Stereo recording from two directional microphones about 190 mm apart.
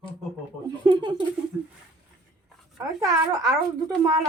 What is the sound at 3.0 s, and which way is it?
Speech, 20° right (ahead or behind).